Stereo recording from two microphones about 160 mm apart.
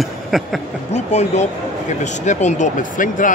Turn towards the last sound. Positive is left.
turn(degrees=55)  # may be behind; listen again after turning